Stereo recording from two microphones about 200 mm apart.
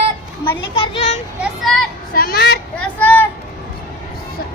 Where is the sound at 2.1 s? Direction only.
45° left (ahead or behind).